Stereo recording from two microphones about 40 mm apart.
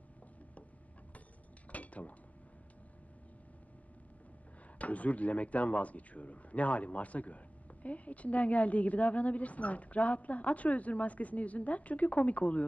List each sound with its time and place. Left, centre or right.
1.7 s cutlery: left
4.7 s speech: left